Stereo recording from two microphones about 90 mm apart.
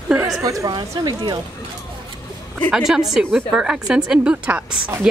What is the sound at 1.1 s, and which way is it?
Speech, 55° right (ahead or behind).